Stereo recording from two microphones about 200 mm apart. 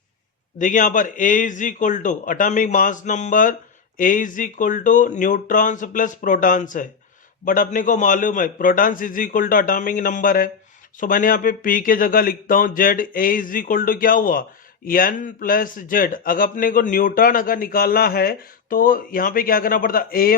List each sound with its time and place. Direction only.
0.6 s a man's voice: 40° left (ahead or behind)